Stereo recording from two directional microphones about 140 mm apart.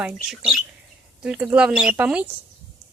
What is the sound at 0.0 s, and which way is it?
Speech, 5° right (ahead or behind).